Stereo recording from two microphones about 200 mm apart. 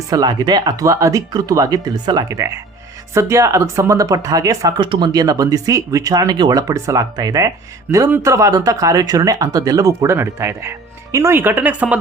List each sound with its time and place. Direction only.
0.1 s speech: 20° right (ahead or behind)